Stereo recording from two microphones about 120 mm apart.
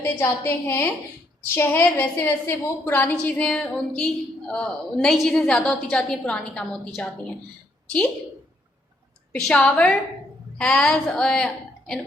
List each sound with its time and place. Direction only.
0.0 s a woman's voice: 20° left (ahead or behind)
9.5 s a woman's voice: 5° left (ahead or behind)